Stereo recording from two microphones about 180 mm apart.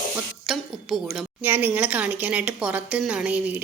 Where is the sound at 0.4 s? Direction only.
Centre (ahead or behind).